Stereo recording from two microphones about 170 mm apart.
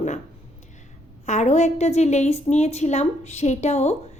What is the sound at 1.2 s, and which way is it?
A woman's voice, 45° left (ahead or behind).